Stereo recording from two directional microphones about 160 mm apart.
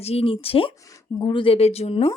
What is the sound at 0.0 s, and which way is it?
A woman's voice, 40° left (ahead or behind).